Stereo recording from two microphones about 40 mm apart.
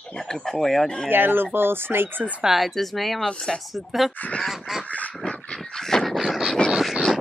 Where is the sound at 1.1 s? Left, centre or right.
Right.